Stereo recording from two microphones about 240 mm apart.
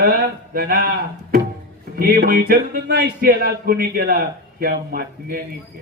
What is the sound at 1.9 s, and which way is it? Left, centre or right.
A man's voice, right.